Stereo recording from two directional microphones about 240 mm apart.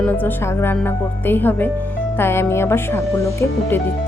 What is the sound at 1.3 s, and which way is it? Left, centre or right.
Speech, centre.